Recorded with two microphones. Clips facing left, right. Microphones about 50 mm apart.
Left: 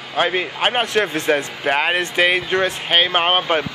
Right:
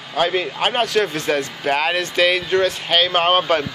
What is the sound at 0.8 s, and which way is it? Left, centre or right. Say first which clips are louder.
Speech: even; left.